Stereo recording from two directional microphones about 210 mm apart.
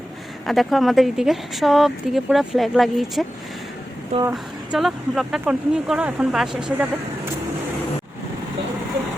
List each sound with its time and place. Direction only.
0.4 s speech: centre (ahead or behind)
4.1 s speech: 30° right (ahead or behind)
4.7 s speech: centre (ahead or behind)